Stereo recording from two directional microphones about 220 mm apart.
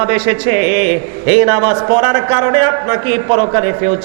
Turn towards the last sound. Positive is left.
turn(degrees=-20)  # may be behind; listen again after turning